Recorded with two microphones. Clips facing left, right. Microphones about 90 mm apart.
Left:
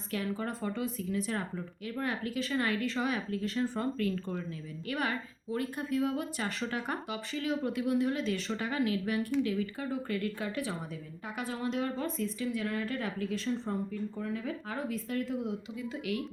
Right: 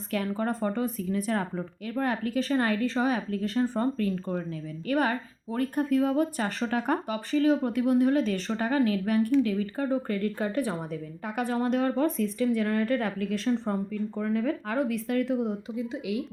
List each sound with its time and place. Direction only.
0.1 s a woman's voice: 50° right (ahead or behind)
11.3 s a woman's voice: 50° right (ahead or behind)
13.5 s speech: 70° right (ahead or behind)
15.7 s speech: 25° right (ahead or behind)